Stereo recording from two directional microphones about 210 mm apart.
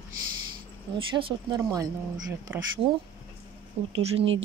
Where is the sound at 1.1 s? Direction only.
20° right (ahead or behind).